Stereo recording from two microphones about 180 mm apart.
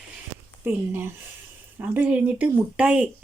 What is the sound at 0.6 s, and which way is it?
Speech, 10° right (ahead or behind).